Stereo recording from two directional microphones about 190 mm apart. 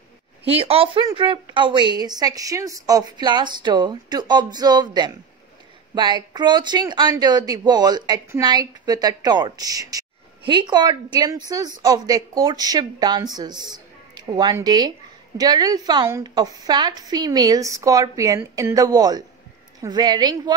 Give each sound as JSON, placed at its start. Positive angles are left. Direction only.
{"t": 0.5, "sound": "speech", "side_deg": -30}